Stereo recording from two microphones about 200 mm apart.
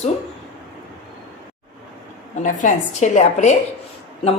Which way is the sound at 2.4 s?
40° left (ahead or behind).